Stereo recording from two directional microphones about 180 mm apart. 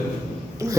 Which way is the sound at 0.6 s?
15° right (ahead or behind).